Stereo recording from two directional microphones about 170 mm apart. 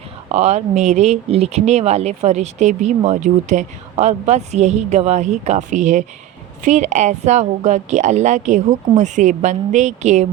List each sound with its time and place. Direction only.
0.3 s speech: 40° right (ahead or behind)